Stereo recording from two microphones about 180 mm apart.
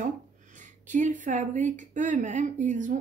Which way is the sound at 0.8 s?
45° right (ahead or behind).